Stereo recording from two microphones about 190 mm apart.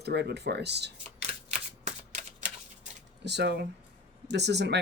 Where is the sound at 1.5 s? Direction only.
40° right (ahead or behind).